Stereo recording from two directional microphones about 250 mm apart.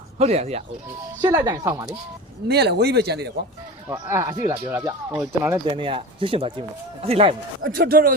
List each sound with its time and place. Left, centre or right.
0.2 s speech: right
2.5 s speech: right
3.8 s speech: centre
7.6 s speech: right